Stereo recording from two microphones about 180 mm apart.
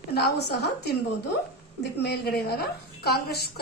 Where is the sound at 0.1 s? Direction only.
65° left (ahead or behind).